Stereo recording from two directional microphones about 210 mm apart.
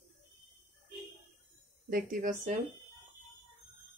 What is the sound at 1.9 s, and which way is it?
Speech, 40° right (ahead or behind).